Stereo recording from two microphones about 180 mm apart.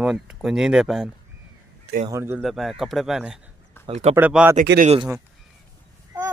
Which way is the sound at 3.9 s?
35° right (ahead or behind).